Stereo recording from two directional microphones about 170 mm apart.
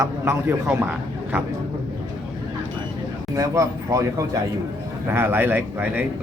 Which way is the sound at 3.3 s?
20° right (ahead or behind).